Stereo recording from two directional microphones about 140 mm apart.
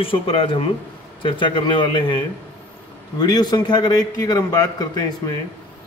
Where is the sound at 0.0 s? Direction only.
40° left (ahead or behind).